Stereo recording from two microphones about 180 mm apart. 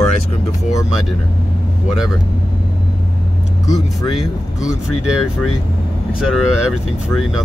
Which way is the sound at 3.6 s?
20° left (ahead or behind).